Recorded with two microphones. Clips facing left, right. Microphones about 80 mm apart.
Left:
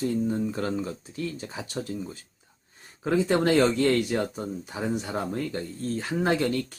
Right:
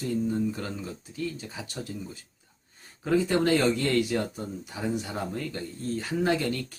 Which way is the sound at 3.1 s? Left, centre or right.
Left.